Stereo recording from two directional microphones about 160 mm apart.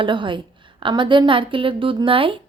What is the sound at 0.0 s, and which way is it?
A woman's voice, 30° right (ahead or behind).